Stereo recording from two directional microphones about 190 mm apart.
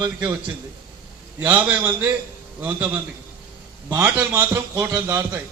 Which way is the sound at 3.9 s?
10° right (ahead or behind).